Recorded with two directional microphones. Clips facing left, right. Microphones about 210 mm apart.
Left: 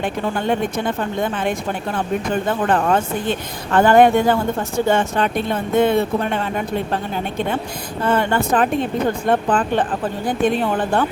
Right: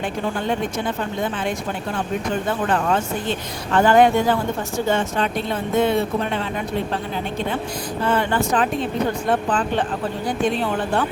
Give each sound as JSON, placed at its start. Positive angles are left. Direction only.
{"t": 1.2, "sound": "speech", "side_deg": 55}
{"t": 2.6, "sound": "a woman's voice", "side_deg": 55}
{"t": 8.0, "sound": "a woman's voice", "side_deg": 50}